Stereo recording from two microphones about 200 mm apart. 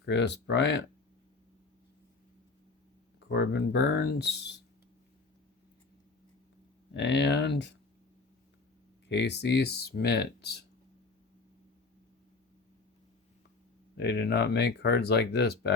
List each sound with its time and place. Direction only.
0.0 s speech: 60° left (ahead or behind)
3.2 s speech: 60° left (ahead or behind)
6.9 s speech: 60° left (ahead or behind)
9.0 s speech: 60° left (ahead or behind)
13.9 s speech: 55° left (ahead or behind)